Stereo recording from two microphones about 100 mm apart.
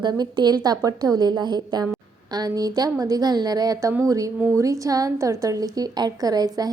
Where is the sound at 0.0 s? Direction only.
45° right (ahead or behind).